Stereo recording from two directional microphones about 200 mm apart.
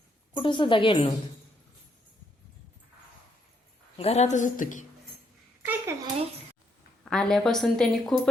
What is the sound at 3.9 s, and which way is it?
Speech, 30° left (ahead or behind).